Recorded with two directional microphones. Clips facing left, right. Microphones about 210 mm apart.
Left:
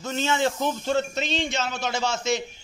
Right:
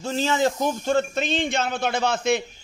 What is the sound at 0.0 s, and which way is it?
Speech, 35° right (ahead or behind).